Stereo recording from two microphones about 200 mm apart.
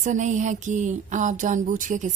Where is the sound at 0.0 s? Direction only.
40° right (ahead or behind).